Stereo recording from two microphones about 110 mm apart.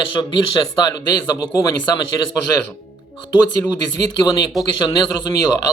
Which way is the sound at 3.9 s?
35° left (ahead or behind).